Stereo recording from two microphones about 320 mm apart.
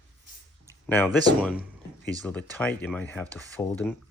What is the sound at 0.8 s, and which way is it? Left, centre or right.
Speech, centre.